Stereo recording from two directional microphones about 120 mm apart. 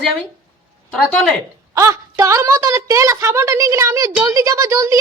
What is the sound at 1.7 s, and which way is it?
A woman's voice, 25° right (ahead or behind).